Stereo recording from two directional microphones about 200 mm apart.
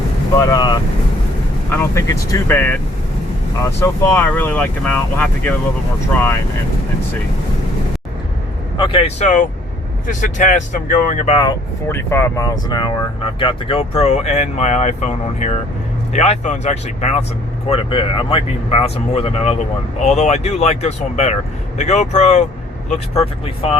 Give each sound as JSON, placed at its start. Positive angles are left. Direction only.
{"t": 0.3, "sound": "speech", "side_deg": 15}
{"t": 3.8, "sound": "speech", "side_deg": 10}
{"t": 8.8, "sound": "speech", "side_deg": 30}
{"t": 11.3, "sound": "speech", "side_deg": 15}